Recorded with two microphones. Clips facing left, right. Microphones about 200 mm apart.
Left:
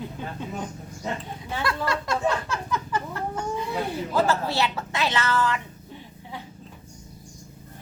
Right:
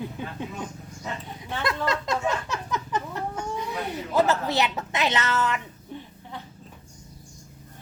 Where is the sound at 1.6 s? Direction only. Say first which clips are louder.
Right 1 dB; 20° right (ahead or behind).